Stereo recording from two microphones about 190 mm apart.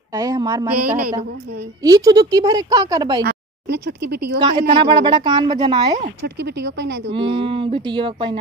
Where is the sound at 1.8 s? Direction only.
20° right (ahead or behind).